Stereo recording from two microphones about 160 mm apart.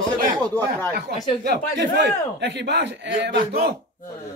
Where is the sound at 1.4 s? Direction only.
90° right.